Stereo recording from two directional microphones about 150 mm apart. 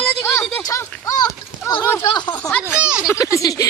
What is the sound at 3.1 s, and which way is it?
Speech, 20° left (ahead or behind).